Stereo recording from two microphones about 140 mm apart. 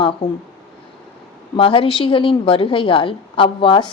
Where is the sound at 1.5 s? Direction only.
40° left (ahead or behind).